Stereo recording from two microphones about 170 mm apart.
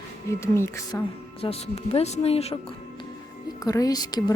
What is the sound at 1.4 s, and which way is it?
Speech, 35° left (ahead or behind).